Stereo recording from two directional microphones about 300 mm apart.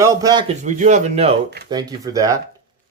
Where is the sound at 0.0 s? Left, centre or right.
Centre.